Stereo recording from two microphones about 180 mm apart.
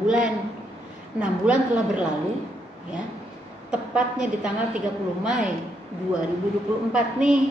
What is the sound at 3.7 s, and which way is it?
A woman's voice, 5° right (ahead or behind).